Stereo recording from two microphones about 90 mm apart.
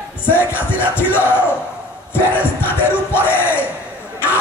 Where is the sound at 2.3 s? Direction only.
25° left (ahead or behind).